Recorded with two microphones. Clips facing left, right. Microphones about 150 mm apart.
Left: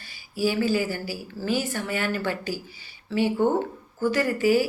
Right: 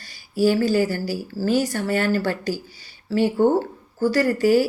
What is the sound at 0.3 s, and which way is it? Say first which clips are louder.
A woman's voice: right 5 dB; 40° right (ahead or behind).